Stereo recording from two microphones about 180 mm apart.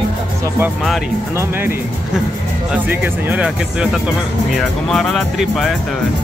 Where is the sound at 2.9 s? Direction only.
10° right (ahead or behind).